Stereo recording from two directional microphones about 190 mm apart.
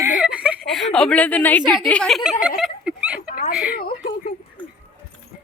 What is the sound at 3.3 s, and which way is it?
Dog, 45° left (ahead or behind).